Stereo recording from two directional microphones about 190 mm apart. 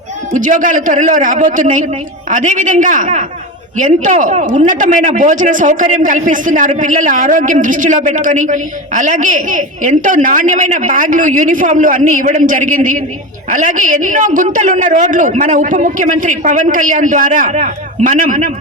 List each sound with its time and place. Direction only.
0.3 s a man's voice: 40° right (ahead or behind)